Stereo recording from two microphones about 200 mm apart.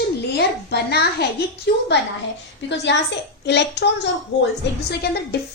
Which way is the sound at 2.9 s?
60° left (ahead or behind).